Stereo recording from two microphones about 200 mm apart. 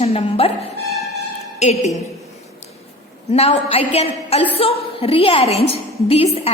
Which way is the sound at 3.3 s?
30° left (ahead or behind).